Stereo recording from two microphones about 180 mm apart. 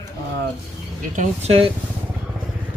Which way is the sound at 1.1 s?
40° right (ahead or behind).